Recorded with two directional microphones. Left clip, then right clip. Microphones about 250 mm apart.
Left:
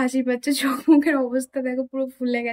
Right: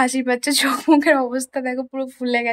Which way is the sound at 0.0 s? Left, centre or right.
Centre.